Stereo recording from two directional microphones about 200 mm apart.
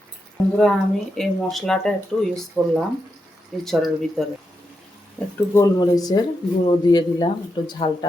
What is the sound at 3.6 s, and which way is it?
Speech, centre (ahead or behind).